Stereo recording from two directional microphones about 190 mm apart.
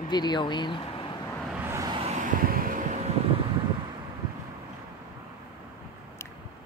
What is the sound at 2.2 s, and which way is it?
Vehicle, 45° right (ahead or behind).